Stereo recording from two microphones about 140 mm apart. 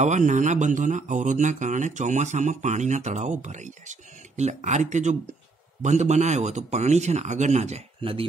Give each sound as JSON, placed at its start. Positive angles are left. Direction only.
{"t": 0.0, "sound": "speech", "side_deg": -60}